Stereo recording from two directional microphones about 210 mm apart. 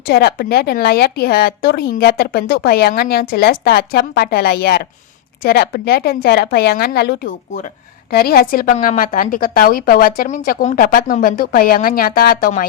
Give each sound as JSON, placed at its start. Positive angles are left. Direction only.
{"t": 0.0, "sound": "speech", "side_deg": 50}